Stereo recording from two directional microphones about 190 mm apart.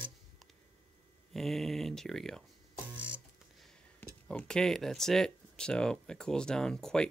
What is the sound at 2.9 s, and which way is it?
Music, 10° right (ahead or behind).